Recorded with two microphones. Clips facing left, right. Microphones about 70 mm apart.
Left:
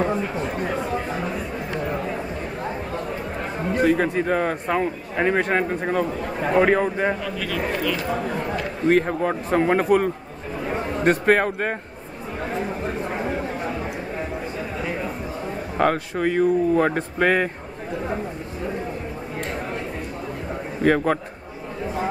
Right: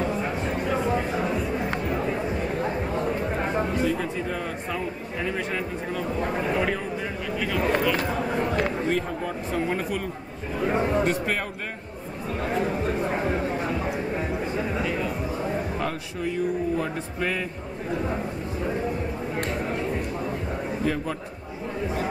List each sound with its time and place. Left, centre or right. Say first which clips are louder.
3.7 s a man's voice: left 6 dB; left
7.3 s speech: right 1 dB; centre
8.8 s a man's voice: left 7 dB; left
11.1 s a man's voice: left 8 dB; left
15.8 s speech: left 8 dB; left
20.8 s speech: left 10 dB; left